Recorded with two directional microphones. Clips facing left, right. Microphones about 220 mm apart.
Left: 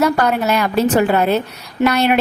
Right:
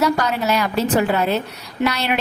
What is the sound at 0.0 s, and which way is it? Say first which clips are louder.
Speech: left 3 dB; 55° left (ahead or behind).